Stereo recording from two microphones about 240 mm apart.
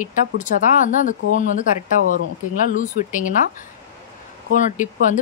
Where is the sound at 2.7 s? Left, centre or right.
Left.